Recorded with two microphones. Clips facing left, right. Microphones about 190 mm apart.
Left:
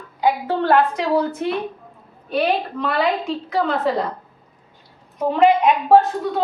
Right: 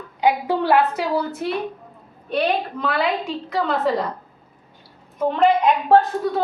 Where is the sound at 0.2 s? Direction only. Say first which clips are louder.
Even; 15° right (ahead or behind).